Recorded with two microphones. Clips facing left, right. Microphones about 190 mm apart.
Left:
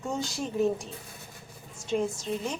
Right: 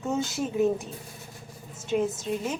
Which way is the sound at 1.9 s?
5° right (ahead or behind).